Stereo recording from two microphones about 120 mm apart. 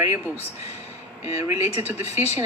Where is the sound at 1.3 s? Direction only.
25° right (ahead or behind).